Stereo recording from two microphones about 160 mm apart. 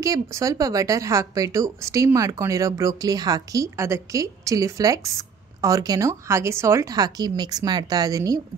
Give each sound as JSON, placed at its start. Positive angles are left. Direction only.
{"t": 0.0, "sound": "a woman's voice", "side_deg": -20}